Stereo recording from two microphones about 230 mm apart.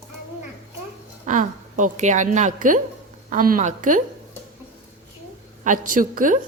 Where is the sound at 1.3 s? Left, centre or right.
Right.